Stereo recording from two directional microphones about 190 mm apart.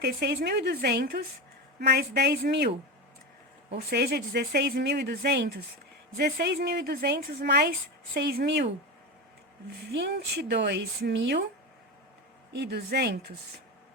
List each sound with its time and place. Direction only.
0.0 s speech: 55° right (ahead or behind)
3.8 s speech: 55° right (ahead or behind)
9.9 s speech: 60° right (ahead or behind)
12.5 s speech: 60° right (ahead or behind)